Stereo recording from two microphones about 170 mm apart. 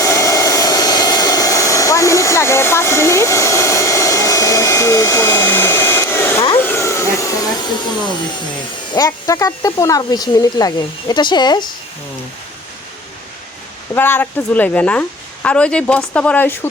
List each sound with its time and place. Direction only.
0.0 s vehicle: 20° left (ahead or behind)
6.6 s vacuum cleaner: 15° left (ahead or behind)
8.9 s speech: 20° left (ahead or behind)
13.9 s speech: 10° left (ahead or behind)